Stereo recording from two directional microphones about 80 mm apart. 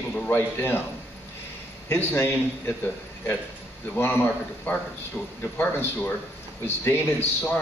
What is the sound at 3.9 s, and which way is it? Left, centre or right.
Speech, left.